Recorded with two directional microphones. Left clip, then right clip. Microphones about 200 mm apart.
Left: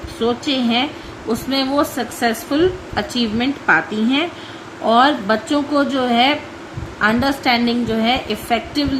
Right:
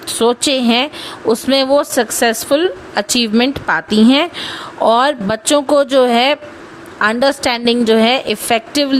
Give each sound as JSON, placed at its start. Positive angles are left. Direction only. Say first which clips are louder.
{"t": 0.2, "sound": "a woman's voice", "louder": "right 5 dB", "side_deg": -60}